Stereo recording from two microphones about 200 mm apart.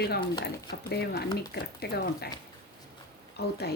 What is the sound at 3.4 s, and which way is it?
Speech, 55° left (ahead or behind).